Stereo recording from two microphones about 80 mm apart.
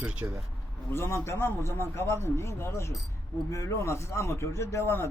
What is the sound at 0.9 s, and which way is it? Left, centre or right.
Speech, left.